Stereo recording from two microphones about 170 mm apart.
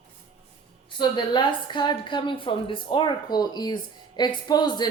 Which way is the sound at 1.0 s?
25° left (ahead or behind).